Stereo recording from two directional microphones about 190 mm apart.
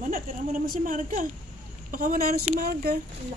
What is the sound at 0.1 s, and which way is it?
A woman's voice, 45° right (ahead or behind).